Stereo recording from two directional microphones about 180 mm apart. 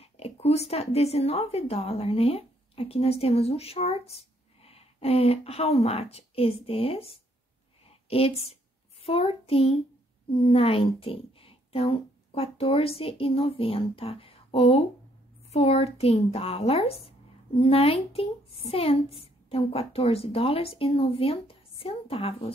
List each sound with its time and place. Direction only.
0.0 s a woman's voice: 35° left (ahead or behind)